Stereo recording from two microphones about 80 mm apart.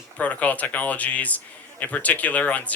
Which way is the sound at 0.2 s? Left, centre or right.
Centre.